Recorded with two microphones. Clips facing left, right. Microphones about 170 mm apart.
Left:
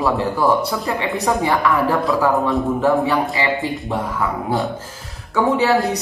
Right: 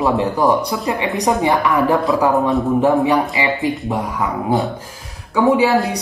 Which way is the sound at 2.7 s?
15° right (ahead or behind).